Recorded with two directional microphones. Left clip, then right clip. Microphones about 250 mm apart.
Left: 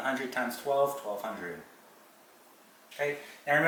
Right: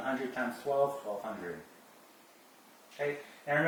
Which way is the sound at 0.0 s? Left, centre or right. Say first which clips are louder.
Left 3 dB; centre.